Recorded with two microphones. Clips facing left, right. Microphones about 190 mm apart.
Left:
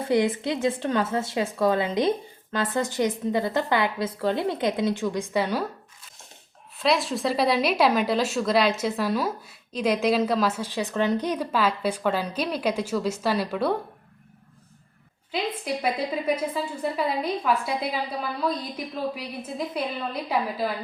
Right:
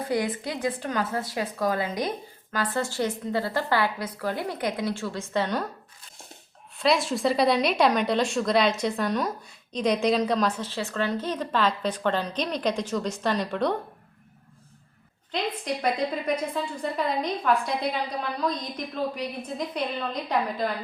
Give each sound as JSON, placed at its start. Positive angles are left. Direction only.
{"t": 0.0, "sound": "speech", "side_deg": 25}
{"t": 6.7, "sound": "a woman's voice", "side_deg": 0}
{"t": 15.3, "sound": "a woman's voice", "side_deg": 5}